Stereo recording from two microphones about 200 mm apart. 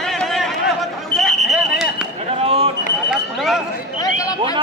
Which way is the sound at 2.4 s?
30° right (ahead or behind).